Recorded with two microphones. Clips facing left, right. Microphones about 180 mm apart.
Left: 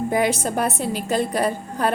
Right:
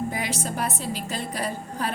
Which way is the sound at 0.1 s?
60° left (ahead or behind).